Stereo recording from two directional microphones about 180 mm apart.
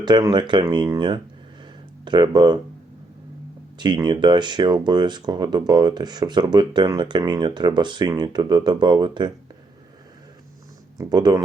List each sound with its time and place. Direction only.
0.0 s speech: 25° right (ahead or behind)
3.8 s speech: 25° right (ahead or behind)
10.9 s speech: 20° right (ahead or behind)